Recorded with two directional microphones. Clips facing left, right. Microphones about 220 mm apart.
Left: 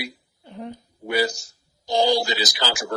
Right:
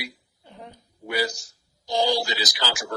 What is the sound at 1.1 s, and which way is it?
Speech, 25° left (ahead or behind).